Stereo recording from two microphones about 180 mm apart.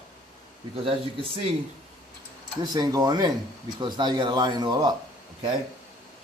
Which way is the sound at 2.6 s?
20° right (ahead or behind).